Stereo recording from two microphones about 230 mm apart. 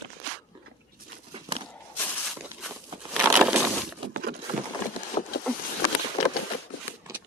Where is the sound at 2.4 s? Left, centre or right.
Centre.